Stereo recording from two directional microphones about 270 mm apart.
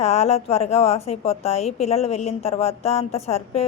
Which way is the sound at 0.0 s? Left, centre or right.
Left.